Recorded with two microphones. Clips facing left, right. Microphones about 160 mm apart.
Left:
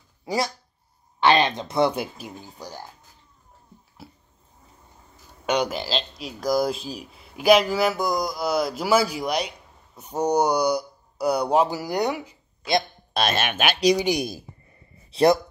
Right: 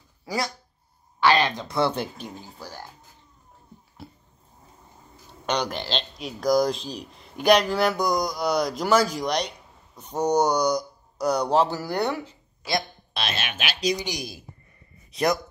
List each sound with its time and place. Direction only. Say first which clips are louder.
0.2 s a sound: left 3 dB; 20° left (ahead or behind)
1.2 s speech: left 2 dB; 20° left (ahead or behind)
4.0 s a sound: right 2 dB; 5° left (ahead or behind)
5.5 s speech: left 3 dB; 5° left (ahead or behind)
13.1 s speech: left 7 dB; 45° left (ahead or behind)
15.0 s speech: left 6 dB; 30° left (ahead or behind)